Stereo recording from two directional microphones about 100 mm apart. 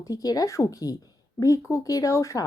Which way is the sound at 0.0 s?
35° left (ahead or behind).